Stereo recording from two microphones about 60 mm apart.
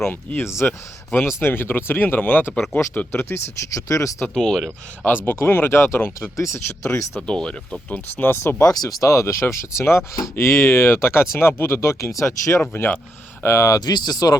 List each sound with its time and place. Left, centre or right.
0.0 s speech: left
0.4 s speech: left
3.8 s speech: left
4.2 s speech: centre
5.0 s speech: left
7.2 s speech: centre
7.9 s speech: left
8.3 s speech: left
8.6 s speech: left
12.7 s speech: left
13.4 s speech: left
13.7 s speech: left